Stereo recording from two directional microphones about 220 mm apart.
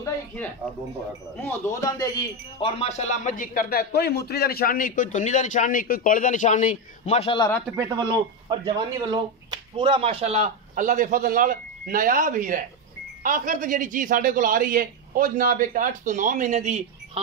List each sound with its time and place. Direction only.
1.4 s speech: 10° left (ahead or behind)
7.7 s speech: 15° right (ahead or behind); by 17.2 s 30° right (ahead or behind)